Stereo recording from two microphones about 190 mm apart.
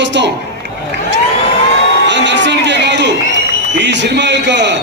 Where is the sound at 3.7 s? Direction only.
65° right (ahead or behind).